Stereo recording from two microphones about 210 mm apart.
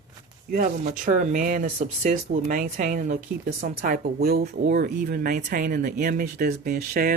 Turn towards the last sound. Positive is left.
turn(degrees=-45)  # may be behind; listen again after turning